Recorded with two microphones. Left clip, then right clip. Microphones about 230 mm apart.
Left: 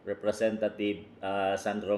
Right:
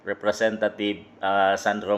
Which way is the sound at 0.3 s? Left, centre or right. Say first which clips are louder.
Right 6 dB; centre.